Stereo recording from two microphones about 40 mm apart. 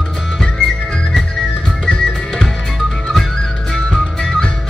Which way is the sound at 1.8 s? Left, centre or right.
Centre.